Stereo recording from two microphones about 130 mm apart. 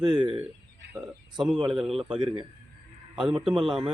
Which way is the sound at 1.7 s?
Centre (ahead or behind).